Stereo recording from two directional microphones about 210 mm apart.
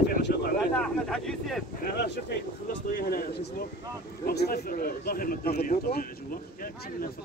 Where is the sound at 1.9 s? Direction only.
50° left (ahead or behind).